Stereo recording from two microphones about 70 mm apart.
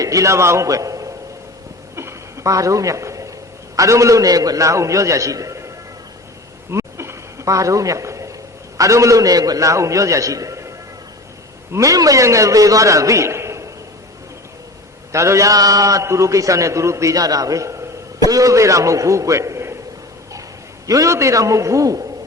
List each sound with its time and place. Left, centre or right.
0.0 s a man's voice: right
2.0 s a sound: right
3.8 s a man's voice: right
6.7 s a sound: right
8.8 s a man's voice: right
11.7 s a man's voice: right
15.1 s a man's voice: right
20.8 s a man's voice: right